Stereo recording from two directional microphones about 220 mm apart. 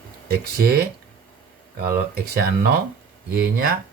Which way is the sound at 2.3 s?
45° right (ahead or behind).